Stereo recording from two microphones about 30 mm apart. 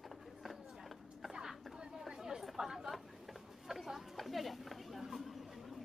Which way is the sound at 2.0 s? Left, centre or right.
Centre.